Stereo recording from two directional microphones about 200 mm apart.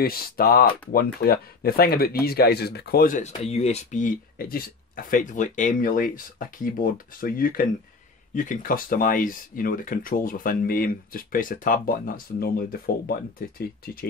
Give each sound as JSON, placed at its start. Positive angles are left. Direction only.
{"t": 0.0, "sound": "speech", "side_deg": 50}